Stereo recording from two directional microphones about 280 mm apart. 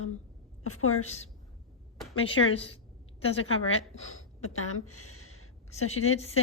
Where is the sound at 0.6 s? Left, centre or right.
Left.